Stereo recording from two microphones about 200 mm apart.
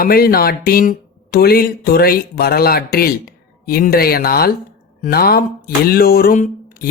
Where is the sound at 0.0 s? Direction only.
50° left (ahead or behind).